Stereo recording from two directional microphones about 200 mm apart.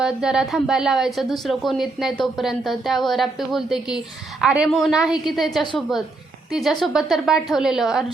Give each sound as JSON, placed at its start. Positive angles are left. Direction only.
{"t": 0.0, "sound": "a woman's voice", "side_deg": -5}